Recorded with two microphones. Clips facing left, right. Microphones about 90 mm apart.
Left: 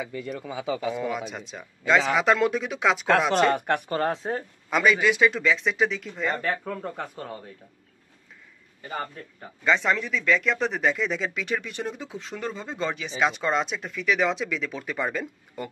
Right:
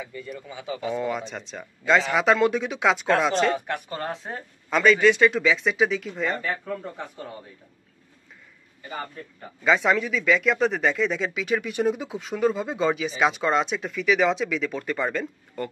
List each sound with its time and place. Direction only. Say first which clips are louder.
0.0 s a man's voice: left 4 dB; 90° left
0.8 s speech: right 1 dB; centre (ahead or behind)
3.5 s speech: left 4 dB; 60° left (ahead or behind)
4.0 s speech: left 5 dB; 35° left (ahead or behind)
4.6 s speech: right 3 dB; 5° left (ahead or behind)
9.7 s speech: right 2 dB; centre (ahead or behind)